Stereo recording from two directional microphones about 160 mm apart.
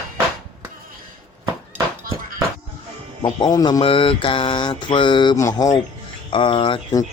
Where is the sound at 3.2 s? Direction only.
25° left (ahead or behind).